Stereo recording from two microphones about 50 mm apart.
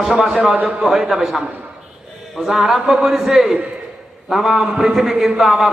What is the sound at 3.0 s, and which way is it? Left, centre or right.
A man's voice, centre.